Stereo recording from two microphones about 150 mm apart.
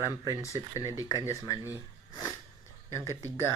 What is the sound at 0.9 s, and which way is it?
Speech, 25° left (ahead or behind).